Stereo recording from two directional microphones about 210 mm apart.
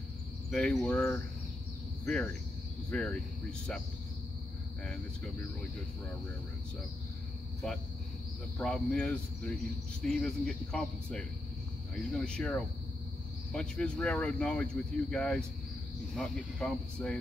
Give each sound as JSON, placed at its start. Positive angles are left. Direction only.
{"t": 0.5, "sound": "speech", "side_deg": 5}
{"t": 8.5, "sound": "speech", "side_deg": 5}